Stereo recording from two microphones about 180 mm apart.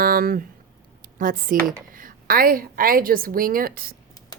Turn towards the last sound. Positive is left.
turn(degrees=-55)  # may be behind; listen again after turning